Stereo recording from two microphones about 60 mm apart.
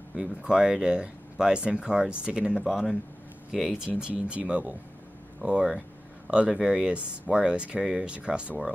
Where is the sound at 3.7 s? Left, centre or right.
Centre.